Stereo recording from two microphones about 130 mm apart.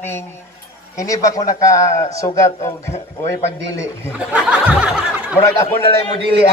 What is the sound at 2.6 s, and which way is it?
Speech, 60° left (ahead or behind).